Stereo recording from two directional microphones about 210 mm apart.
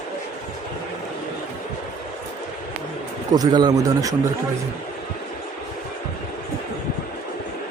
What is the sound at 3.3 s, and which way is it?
Speech, 20° right (ahead or behind).